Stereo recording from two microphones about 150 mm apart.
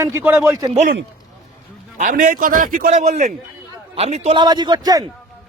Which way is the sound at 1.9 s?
65° right (ahead or behind).